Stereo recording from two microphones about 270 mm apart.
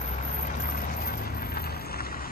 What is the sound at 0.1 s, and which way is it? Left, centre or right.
Vehicle, left.